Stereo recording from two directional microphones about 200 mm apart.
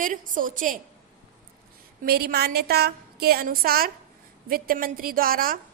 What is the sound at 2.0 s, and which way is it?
A woman's voice, 50° right (ahead or behind).